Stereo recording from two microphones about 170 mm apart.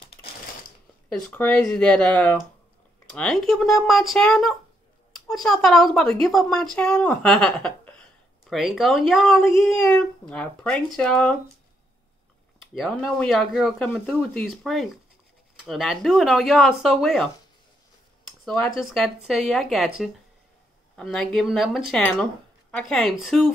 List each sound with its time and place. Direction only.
0.0 s typewriter: 35° left (ahead or behind)
1.3 s speech: 10° left (ahead or behind)
12.7 s speech: centre (ahead or behind)